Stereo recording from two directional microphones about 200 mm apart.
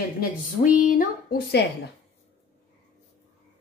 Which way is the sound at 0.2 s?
45° left (ahead or behind).